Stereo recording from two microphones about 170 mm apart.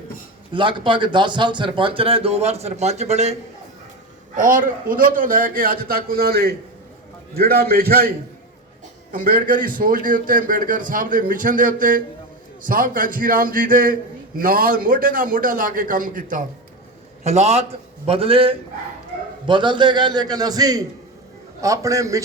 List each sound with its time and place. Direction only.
0.5 s speech: 30° right (ahead or behind)
4.4 s a man's voice: 50° right (ahead or behind)
9.1 s a man's voice: 55° right (ahead or behind)
17.2 s a man's voice: 40° right (ahead or behind); by 22.2 s 20° right (ahead or behind)